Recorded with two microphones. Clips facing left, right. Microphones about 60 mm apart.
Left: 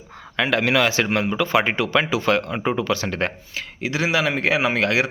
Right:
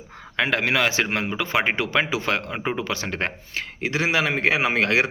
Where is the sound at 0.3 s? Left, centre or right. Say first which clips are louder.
Left 3 dB; right.